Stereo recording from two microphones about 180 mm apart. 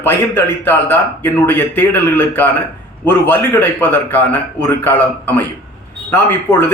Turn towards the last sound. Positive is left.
turn(degrees=10)  # may be behind; listen again after turning